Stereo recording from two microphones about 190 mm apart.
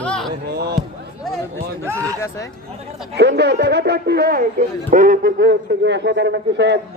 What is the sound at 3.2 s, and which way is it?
A man's voice, 60° right (ahead or behind).